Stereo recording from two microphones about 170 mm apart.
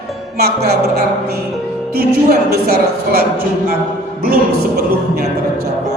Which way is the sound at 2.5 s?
70° right (ahead or behind).